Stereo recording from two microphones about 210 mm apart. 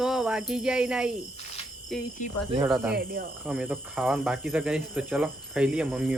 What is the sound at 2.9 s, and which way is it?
Speech, 45° right (ahead or behind).